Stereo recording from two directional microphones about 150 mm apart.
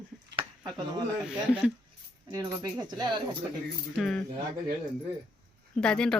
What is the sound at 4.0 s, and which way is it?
Speech, 5° left (ahead or behind).